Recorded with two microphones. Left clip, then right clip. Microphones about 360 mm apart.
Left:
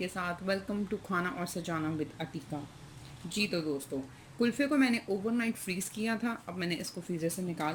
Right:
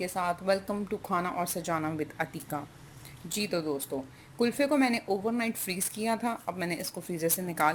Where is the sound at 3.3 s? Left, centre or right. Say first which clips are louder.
Right 2 dB; centre.